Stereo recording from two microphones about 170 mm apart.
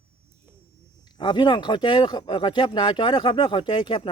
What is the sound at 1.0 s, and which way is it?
Speech, 25° left (ahead or behind).